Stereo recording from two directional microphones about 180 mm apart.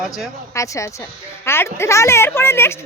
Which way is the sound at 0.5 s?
15° left (ahead or behind).